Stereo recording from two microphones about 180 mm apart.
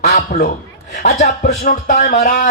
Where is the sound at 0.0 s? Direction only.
40° left (ahead or behind).